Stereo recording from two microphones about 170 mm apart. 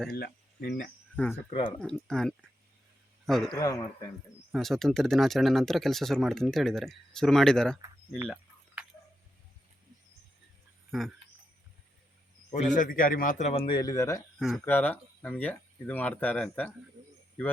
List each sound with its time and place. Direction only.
0.2 s speech: 70° left (ahead or behind)
1.1 s speech: 10° left (ahead or behind)
1.5 s speech: 30° left (ahead or behind)
1.8 s a man's voice: 5° left (ahead or behind)
3.5 s speech: 20° left (ahead or behind)
4.5 s speech: centre (ahead or behind)
10.9 s speech: centre (ahead or behind)
12.5 s a man's voice: 45° left (ahead or behind)
13.5 s speech: 30° left (ahead or behind)
14.3 s speech: 5° left (ahead or behind)